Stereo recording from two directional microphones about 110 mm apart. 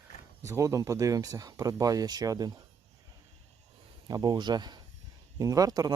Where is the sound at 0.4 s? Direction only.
30° right (ahead or behind).